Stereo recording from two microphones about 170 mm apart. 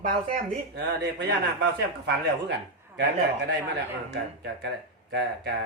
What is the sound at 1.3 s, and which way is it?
Speech, 90° right.